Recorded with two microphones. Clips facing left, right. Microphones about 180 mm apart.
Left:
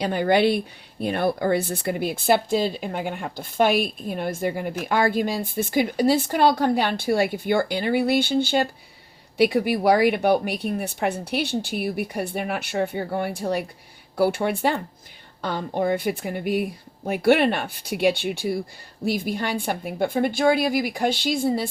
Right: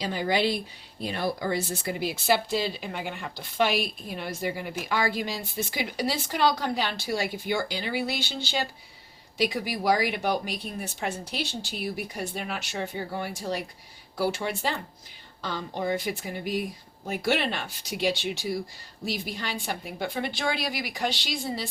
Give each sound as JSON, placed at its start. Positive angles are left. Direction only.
{"t": 0.0, "sound": "a woman's voice", "side_deg": 55}